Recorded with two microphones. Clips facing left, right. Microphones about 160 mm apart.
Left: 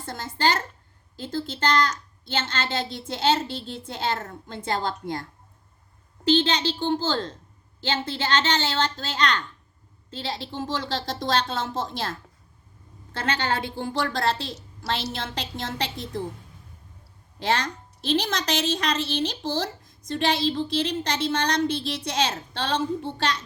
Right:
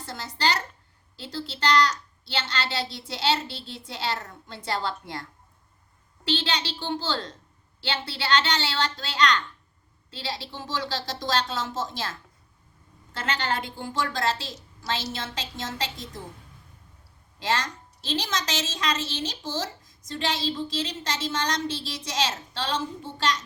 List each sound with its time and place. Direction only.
0.0 s a sound: 50° left (ahead or behind)
1.1 s a woman's voice: 45° left (ahead or behind)
6.2 s a woman's voice: 40° left (ahead or behind)
13.7 s a woman's voice: 55° left (ahead or behind)
17.4 s a woman's voice: 55° left (ahead or behind)